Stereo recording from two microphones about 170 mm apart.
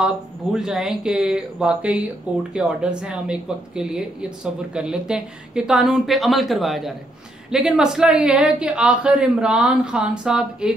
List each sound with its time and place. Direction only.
0.0 s speech: 5° right (ahead or behind)